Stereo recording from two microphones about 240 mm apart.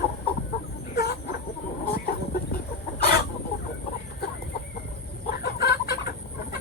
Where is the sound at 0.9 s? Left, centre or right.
Left.